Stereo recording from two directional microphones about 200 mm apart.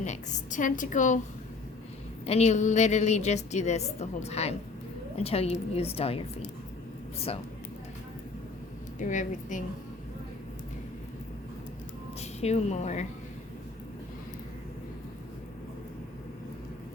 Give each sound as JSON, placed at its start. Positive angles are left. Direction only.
{"t": 0.0, "sound": "a woman's voice", "side_deg": 35}
{"t": 2.2, "sound": "a woman's voice", "side_deg": 35}
{"t": 9.0, "sound": "a woman's voice", "side_deg": 40}
{"t": 12.2, "sound": "a woman's voice", "side_deg": 30}